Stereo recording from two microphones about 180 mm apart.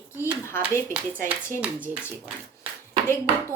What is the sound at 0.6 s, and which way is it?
Speech, 5° right (ahead or behind).